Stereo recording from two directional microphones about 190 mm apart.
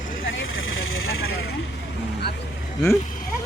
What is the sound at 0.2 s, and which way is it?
Vehicle, 90° left.